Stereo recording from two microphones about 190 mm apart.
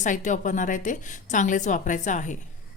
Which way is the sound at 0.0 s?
40° left (ahead or behind).